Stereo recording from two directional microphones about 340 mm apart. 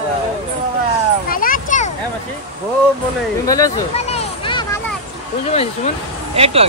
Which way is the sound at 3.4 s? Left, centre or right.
Centre.